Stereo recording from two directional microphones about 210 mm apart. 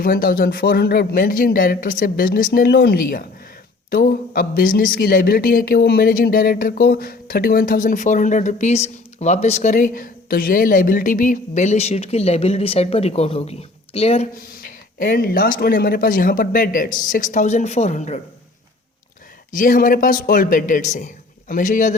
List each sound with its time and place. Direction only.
0.0 s speech: 45° left (ahead or behind)
9.7 s a woman's voice: 40° left (ahead or behind)
14.6 s a man's voice: 40° left (ahead or behind)
19.5 s a man's voice: 40° left (ahead or behind)